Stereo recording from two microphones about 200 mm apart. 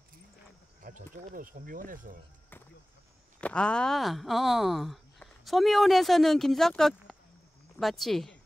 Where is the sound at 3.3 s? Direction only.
5° left (ahead or behind).